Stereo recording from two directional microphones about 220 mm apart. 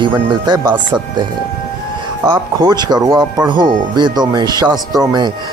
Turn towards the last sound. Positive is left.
turn(degrees=-20)  # may be behind; listen again after turning